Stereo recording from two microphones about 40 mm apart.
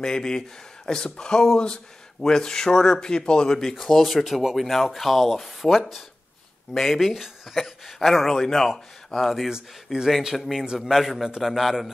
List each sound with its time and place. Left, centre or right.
0.0 s speech: centre
3.7 s speech: centre
9.9 s speech: centre
10.3 s speech: centre